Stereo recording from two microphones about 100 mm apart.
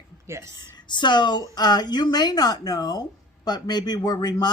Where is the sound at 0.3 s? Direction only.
30° right (ahead or behind).